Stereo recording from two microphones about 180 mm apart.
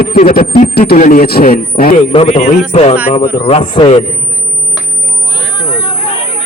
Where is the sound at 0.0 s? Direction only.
55° left (ahead or behind).